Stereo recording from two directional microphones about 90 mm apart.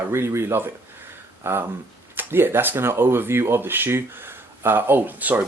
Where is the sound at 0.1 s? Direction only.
30° right (ahead or behind).